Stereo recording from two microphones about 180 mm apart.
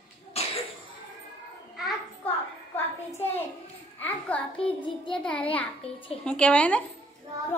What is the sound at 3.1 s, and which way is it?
Hands, 10° left (ahead or behind).